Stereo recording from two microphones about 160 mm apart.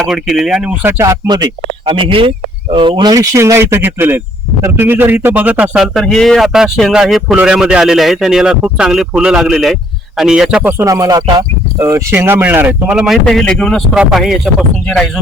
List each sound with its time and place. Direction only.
0.1 s a man's voice: centre (ahead or behind)